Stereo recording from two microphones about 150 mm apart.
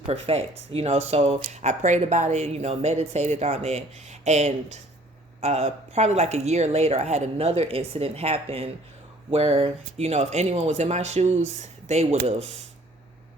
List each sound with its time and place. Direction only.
0.1 s speech: 40° right (ahead or behind)